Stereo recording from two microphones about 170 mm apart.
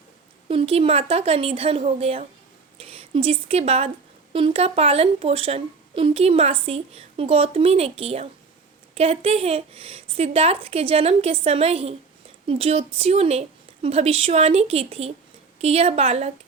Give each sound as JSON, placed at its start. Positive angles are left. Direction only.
{"t": 0.4, "sound": "a woman's voice", "side_deg": -35}